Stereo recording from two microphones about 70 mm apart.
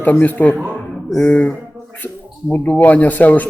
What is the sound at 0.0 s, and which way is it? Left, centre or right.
A man's voice, left.